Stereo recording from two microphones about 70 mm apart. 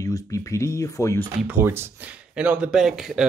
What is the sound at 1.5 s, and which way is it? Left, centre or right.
Speech, right.